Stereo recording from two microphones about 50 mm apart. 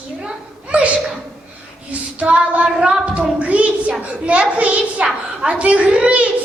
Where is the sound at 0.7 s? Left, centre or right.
Right.